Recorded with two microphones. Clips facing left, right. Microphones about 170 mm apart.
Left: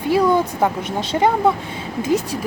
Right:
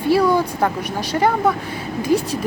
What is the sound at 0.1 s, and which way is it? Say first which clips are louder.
Speech: even; 20° left (ahead or behind).